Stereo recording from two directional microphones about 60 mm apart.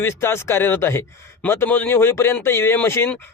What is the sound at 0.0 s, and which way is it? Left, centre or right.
A man's voice, left.